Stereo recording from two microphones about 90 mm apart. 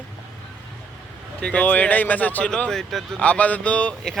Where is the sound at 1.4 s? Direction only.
15° left (ahead or behind).